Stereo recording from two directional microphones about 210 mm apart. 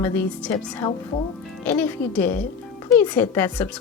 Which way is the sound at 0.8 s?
20° left (ahead or behind).